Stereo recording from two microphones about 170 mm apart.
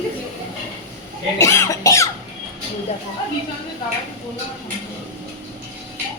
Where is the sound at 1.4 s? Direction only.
15° left (ahead or behind).